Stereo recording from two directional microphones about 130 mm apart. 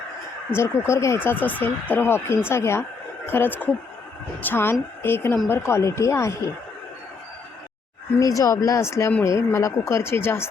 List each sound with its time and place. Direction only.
0.5 s a woman's voice: 20° left (ahead or behind)
8.2 s speech: 25° left (ahead or behind)